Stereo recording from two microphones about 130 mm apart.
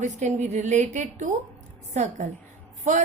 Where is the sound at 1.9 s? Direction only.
65° right (ahead or behind).